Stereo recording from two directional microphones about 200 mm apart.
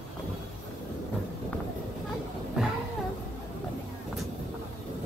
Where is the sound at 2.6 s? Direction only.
5° right (ahead or behind).